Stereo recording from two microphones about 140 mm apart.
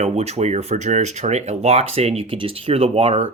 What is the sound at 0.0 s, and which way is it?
Speech, 50° right (ahead or behind).